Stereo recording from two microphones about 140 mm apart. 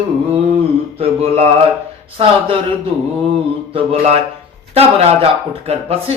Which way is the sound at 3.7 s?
50° right (ahead or behind).